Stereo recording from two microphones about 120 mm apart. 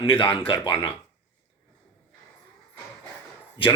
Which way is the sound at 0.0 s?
45° left (ahead or behind).